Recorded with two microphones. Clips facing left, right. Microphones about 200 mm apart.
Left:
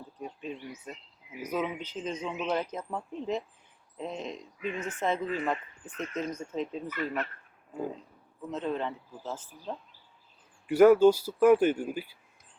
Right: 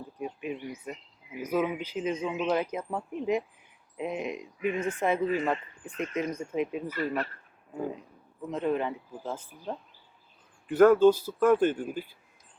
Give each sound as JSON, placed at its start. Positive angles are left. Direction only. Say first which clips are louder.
{"t": 0.2, "sound": "bird", "louder": "right 4 dB", "side_deg": -10}
{"t": 1.4, "sound": "speech", "louder": "right 4 dB", "side_deg": -10}
{"t": 6.9, "sound": "speech", "louder": "right 1 dB", "side_deg": -35}
{"t": 8.4, "sound": "speech", "louder": "right 3 dB", "side_deg": -10}
{"t": 10.7, "sound": "speech", "louder": "even", "side_deg": 10}